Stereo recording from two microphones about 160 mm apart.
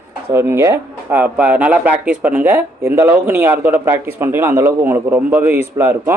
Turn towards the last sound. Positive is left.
turn(degrees=-15)  # may be behind; listen again after turning